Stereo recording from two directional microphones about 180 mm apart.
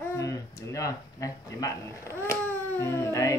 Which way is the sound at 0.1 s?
15° left (ahead or behind).